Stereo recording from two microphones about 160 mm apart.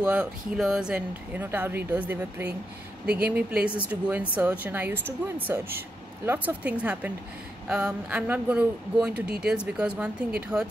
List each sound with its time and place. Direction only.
0.0 s speech: 5° right (ahead or behind)